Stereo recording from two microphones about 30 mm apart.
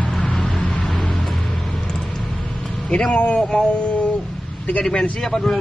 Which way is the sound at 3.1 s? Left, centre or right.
Left.